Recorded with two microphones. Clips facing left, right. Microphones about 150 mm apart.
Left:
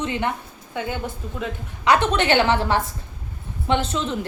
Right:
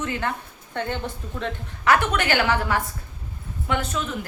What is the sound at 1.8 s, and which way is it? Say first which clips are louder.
A woman's voice: left 2 dB; 20° left (ahead or behind).